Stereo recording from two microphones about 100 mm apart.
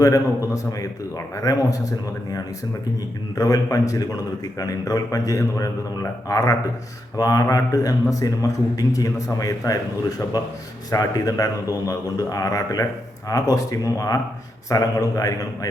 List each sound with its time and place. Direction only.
0.0 s a man's voice: 35° left (ahead or behind)
3.3 s a man's voice: 35° left (ahead or behind)